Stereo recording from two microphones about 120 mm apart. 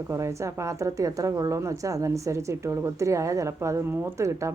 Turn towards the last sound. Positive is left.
turn(degrees=-25)  # may be behind; listen again after turning